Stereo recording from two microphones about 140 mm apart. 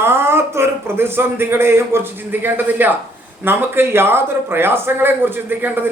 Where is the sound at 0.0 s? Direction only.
15° right (ahead or behind).